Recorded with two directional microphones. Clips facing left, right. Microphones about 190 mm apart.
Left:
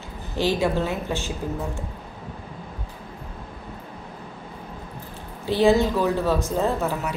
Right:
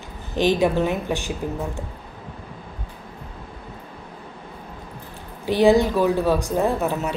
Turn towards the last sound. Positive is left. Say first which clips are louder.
# right 2 dB
turn(degrees=-20)  # may be behind; listen again after turning